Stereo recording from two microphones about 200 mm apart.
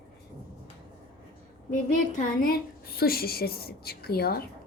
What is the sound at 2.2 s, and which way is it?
A woman's voice, 45° left (ahead or behind).